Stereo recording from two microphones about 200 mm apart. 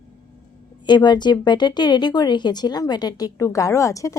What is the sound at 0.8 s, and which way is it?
Speech, 20° left (ahead or behind).